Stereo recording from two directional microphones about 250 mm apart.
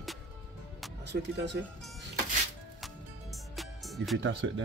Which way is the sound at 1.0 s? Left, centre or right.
Right.